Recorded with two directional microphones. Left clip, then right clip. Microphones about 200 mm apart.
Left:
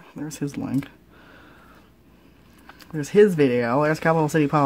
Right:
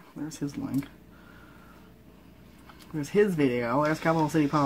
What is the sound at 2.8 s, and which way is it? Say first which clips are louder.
Speech: left 8 dB; 40° left (ahead or behind).